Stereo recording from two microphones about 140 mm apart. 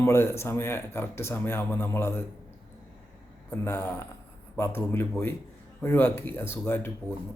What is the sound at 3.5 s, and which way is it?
Speech, 15° left (ahead or behind).